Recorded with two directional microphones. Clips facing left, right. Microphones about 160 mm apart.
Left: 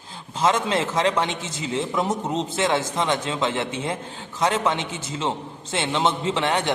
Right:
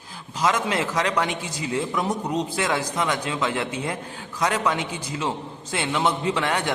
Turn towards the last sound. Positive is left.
turn(degrees=20)  # may be behind; listen again after turning